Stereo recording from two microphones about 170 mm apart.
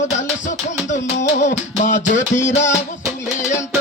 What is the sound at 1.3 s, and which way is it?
Music, 45° left (ahead or behind).